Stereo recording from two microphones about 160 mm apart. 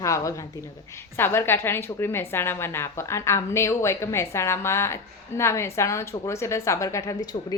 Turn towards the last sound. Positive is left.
turn(degrees=20)  # may be behind; listen again after turning